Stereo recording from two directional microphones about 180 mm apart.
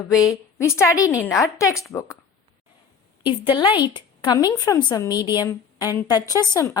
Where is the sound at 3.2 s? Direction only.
25° left (ahead or behind).